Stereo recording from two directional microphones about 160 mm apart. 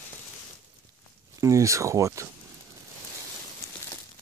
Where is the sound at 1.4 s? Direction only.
20° right (ahead or behind).